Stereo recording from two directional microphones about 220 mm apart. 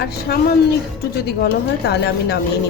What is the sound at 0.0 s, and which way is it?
Speech, 45° left (ahead or behind).